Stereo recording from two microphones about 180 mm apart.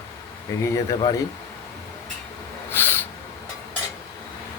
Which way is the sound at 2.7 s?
10° left (ahead or behind).